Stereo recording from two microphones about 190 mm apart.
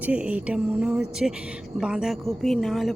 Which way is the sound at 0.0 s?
5° right (ahead or behind).